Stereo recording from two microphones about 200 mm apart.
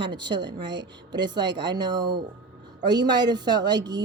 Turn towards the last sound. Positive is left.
turn(degrees=-20)  # may be behind; listen again after turning